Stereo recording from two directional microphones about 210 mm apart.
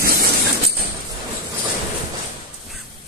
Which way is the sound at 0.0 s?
45° right (ahead or behind).